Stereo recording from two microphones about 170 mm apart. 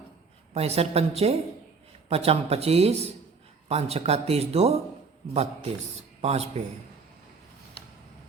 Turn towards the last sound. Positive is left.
turn(degrees=-40)  # may be behind; listen again after turning